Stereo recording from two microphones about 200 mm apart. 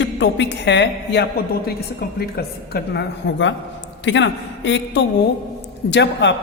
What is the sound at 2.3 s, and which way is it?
A woman's voice, 55° left (ahead or behind).